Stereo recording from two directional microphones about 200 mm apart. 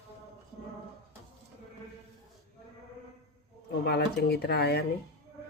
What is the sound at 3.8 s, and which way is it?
Speech, 55° left (ahead or behind).